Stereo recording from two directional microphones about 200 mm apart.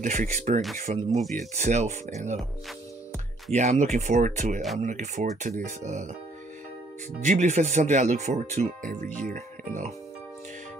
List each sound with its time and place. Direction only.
0.0 s speech: 40° right (ahead or behind)
1.1 s speech: centre (ahead or behind)
1.5 s speech: 35° right (ahead or behind)
3.5 s speech: 35° right (ahead or behind)
7.2 s speech: 35° right (ahead or behind)